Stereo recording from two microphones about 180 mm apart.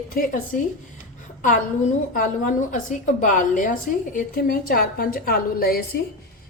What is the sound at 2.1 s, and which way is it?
A woman's voice, 45° left (ahead or behind).